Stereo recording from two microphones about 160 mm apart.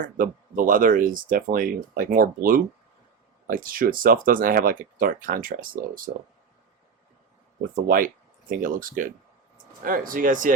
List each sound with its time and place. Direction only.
0.0 s speech: 60° right (ahead or behind)
7.9 s speech: 60° right (ahead or behind)